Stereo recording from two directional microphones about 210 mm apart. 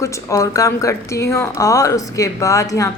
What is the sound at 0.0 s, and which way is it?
A woman's voice, 15° left (ahead or behind).